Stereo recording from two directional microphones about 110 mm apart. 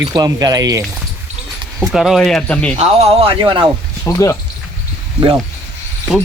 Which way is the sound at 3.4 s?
50° right (ahead or behind).